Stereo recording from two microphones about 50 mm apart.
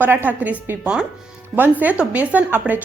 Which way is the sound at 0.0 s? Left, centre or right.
Right.